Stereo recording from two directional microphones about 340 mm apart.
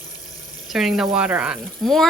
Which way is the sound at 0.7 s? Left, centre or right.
Centre.